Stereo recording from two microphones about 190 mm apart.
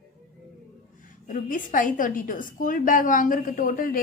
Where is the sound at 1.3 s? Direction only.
45° left (ahead or behind).